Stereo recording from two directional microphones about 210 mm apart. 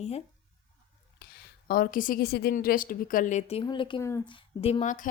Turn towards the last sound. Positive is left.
turn(degrees=35)  # may be behind; listen again after turning